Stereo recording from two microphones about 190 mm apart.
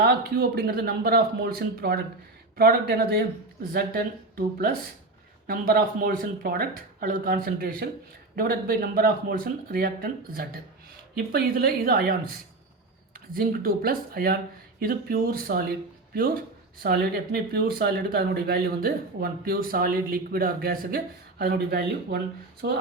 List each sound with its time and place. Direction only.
0.0 s speech: 55° right (ahead or behind)